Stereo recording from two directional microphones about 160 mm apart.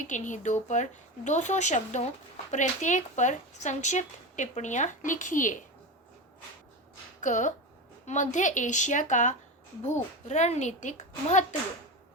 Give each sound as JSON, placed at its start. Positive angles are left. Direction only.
{"t": 0.1, "sound": "speech", "side_deg": 50}
{"t": 7.2, "sound": "speech", "side_deg": 50}